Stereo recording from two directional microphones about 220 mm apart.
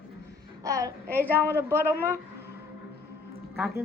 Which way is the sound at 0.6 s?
15° right (ahead or behind).